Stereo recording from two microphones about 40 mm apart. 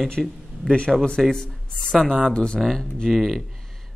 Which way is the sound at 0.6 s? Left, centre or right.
Left.